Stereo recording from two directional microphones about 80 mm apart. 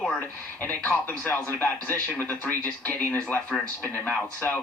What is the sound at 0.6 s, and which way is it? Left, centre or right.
Speech, left.